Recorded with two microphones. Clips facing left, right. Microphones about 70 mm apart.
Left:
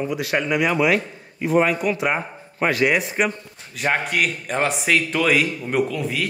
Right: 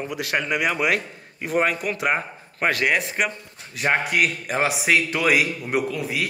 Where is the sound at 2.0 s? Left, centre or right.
Centre.